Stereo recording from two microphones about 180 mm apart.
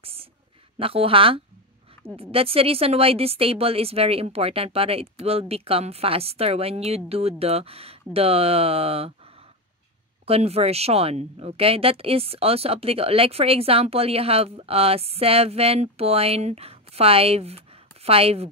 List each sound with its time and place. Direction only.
0.0 s a sound: 30° right (ahead or behind)
0.7 s a woman's voice: 30° right (ahead or behind)
10.2 s a woman's voice: 35° right (ahead or behind)